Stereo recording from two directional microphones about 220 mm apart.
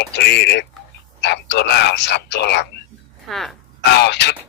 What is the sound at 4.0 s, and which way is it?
Speech, 50° left (ahead or behind).